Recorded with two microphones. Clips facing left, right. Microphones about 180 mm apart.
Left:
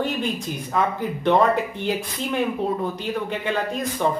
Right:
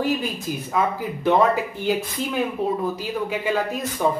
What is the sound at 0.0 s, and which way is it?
Speech, 5° right (ahead or behind).